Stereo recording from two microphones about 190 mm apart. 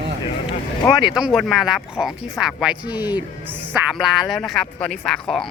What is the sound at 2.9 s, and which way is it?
Speech, 20° left (ahead or behind).